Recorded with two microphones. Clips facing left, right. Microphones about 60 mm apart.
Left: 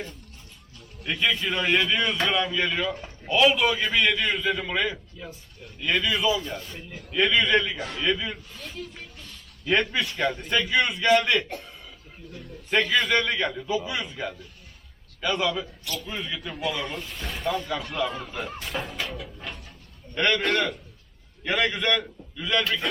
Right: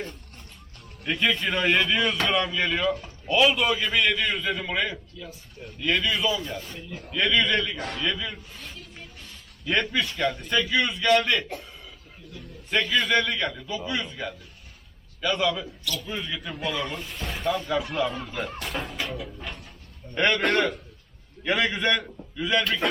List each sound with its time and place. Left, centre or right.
1.0 s speech: centre
5.2 s speech: left
5.8 s speech: centre
9.2 s a sound: centre
9.7 s a man's voice: centre
12.7 s a man's voice: centre